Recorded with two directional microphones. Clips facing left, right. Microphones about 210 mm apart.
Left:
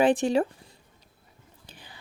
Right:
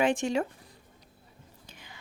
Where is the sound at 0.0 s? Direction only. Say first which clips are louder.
Left 5 dB; 35° left (ahead or behind).